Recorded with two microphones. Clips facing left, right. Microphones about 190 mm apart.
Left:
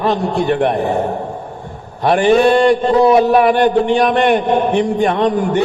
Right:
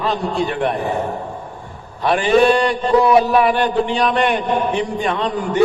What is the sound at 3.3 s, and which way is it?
A man's voice, 50° left (ahead or behind).